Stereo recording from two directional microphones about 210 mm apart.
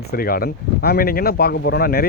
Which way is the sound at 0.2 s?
45° left (ahead or behind).